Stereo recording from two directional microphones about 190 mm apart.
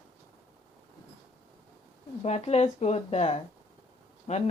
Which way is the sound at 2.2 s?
35° left (ahead or behind).